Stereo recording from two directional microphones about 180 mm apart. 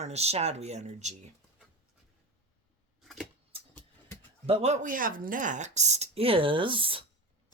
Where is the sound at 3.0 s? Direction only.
Centre (ahead or behind).